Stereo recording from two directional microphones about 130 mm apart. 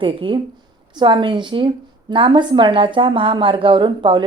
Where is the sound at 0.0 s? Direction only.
40° right (ahead or behind).